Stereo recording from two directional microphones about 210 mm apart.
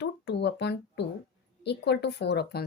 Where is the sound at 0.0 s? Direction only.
55° left (ahead or behind).